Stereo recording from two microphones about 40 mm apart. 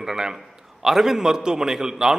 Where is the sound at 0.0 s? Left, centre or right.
Centre.